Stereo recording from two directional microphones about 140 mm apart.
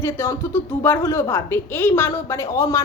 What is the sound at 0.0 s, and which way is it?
A woman's voice, 20° left (ahead or behind).